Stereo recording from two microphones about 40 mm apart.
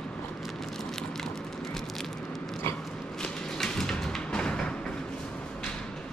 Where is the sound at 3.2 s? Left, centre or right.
Centre.